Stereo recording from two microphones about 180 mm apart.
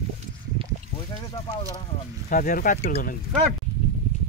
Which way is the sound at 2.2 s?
50° left (ahead or behind).